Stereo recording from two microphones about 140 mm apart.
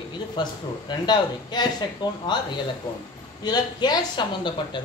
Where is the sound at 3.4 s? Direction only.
30° left (ahead or behind).